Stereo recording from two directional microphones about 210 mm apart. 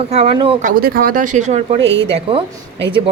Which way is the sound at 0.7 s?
45° right (ahead or behind).